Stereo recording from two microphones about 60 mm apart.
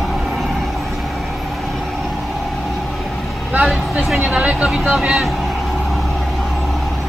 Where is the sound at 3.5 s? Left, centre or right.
Right.